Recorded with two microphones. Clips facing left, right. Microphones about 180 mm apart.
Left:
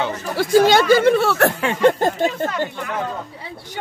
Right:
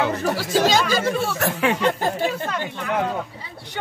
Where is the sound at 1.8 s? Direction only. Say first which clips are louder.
Left 7 dB; 50° left (ahead or behind).